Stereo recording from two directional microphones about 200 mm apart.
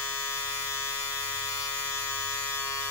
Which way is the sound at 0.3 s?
15° left (ahead or behind).